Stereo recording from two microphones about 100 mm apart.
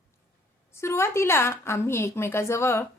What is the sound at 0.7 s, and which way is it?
A woman's voice, 25° left (ahead or behind).